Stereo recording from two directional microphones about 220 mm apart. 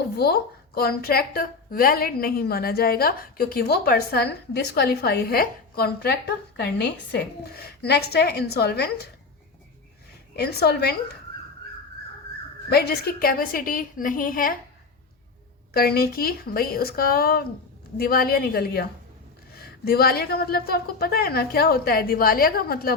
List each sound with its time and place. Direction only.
0.2 s a woman's voice: 45° left (ahead or behind)
10.3 s a woman's voice: 45° left (ahead or behind)
12.7 s a woman's voice: 45° left (ahead or behind)
15.7 s a woman's voice: 45° left (ahead or behind)